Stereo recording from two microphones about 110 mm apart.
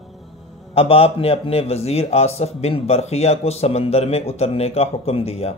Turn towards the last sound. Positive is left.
turn(degrees=70)  # may be behind; listen again after turning